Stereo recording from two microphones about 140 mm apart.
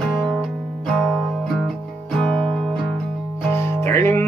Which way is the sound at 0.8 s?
10° left (ahead or behind).